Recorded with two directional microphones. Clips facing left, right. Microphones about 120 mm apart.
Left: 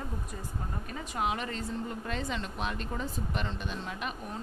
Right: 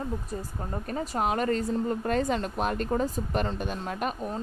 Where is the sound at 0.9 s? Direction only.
40° right (ahead or behind).